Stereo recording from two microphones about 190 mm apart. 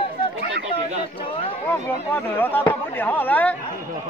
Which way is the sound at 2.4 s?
10° left (ahead or behind).